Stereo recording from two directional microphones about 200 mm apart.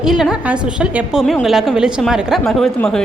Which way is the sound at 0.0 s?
Centre (ahead or behind).